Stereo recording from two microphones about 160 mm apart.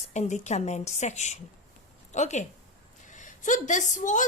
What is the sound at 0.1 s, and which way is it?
A woman's voice, 45° left (ahead or behind).